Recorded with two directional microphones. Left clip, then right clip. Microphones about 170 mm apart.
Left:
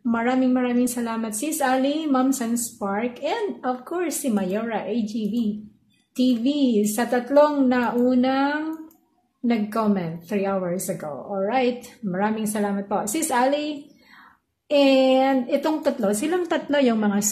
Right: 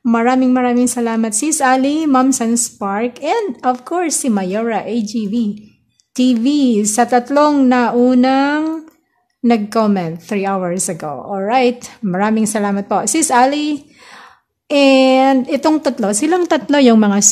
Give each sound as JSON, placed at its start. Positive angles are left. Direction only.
{"t": 0.0, "sound": "a woman's voice", "side_deg": -45}